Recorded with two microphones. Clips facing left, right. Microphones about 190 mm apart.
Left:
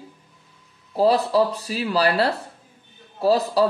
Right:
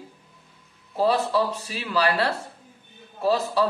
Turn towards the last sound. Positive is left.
turn(degrees=35)  # may be behind; listen again after turning